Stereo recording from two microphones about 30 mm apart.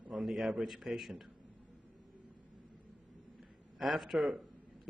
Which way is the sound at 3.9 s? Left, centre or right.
Centre.